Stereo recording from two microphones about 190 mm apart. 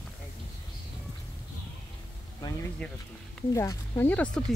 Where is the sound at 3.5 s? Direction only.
15° left (ahead or behind).